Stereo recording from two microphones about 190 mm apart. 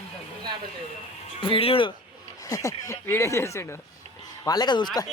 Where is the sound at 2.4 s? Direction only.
15° left (ahead or behind).